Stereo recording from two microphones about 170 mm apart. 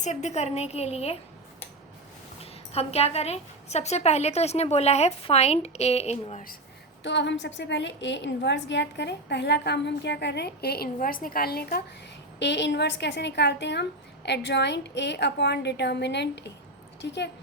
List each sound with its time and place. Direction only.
0.0 s a woman's voice: 45° left (ahead or behind)
2.4 s a woman's voice: 35° left (ahead or behind)
7.0 s a woman's voice: 90° left; by 11.8 s 65° left (ahead or behind)
12.4 s a woman's voice: 90° left